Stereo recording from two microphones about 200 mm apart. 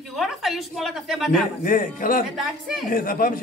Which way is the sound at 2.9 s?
45° left (ahead or behind).